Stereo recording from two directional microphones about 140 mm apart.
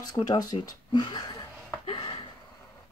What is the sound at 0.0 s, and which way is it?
Speech, 30° left (ahead or behind).